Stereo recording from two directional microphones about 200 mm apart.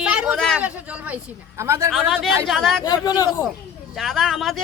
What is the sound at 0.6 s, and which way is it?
Speech, 5° right (ahead or behind).